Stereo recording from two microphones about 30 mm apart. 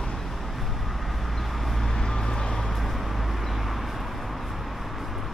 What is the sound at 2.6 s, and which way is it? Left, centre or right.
Vehicle, centre.